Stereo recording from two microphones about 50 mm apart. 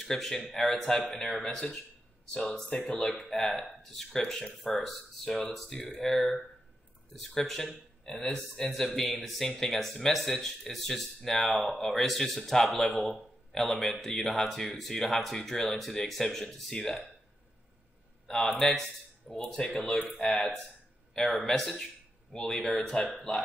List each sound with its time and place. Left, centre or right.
0.0 s speech: centre
2.3 s speech: centre
18.2 s a man's voice: centre